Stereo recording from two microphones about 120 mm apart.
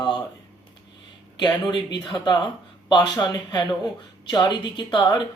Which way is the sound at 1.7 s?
40° left (ahead or behind).